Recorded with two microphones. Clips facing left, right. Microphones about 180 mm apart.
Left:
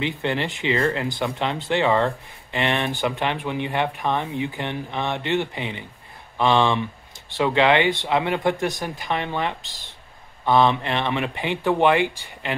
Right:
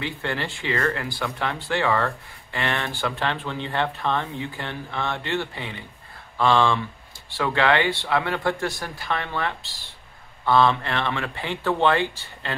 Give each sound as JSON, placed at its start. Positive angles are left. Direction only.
{"t": 0.0, "sound": "speech", "side_deg": 20}